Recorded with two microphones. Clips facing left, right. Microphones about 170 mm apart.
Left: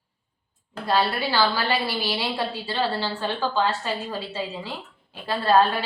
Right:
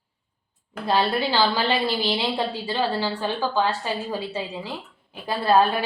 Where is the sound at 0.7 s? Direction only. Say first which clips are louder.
Right 1 dB; 20° right (ahead or behind).